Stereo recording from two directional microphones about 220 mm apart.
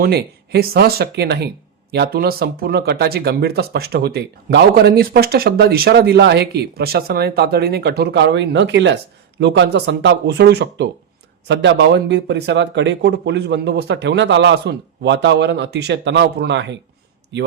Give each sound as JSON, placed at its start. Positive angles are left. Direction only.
{"t": 0.0, "sound": "speech", "side_deg": -45}